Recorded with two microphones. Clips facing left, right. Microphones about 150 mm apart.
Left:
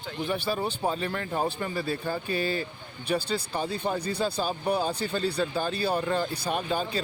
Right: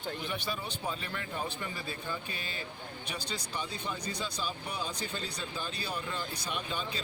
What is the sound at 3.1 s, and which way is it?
Speech, 50° left (ahead or behind).